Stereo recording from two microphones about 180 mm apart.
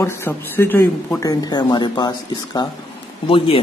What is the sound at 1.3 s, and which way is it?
Speech, 20° left (ahead or behind).